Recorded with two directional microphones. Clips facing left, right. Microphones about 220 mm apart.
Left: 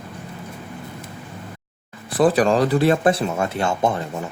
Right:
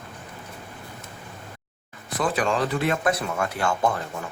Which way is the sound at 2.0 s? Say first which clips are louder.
Left 8 dB; 35° left (ahead or behind).